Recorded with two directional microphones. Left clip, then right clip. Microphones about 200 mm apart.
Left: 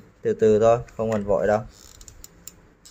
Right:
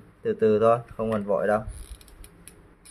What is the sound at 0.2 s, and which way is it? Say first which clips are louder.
Speech: left 3 dB; 20° left (ahead or behind).